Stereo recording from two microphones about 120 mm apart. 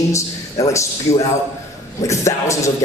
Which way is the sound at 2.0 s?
25° left (ahead or behind).